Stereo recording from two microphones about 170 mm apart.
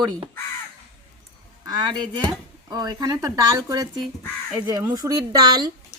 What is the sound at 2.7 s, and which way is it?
Speech, 20° right (ahead or behind).